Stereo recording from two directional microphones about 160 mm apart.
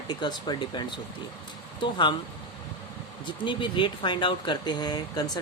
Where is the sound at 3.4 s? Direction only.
30° left (ahead or behind).